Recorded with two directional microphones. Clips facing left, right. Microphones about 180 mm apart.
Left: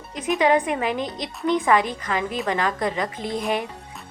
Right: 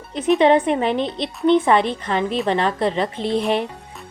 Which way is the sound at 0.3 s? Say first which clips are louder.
Right 4 dB; 25° right (ahead or behind).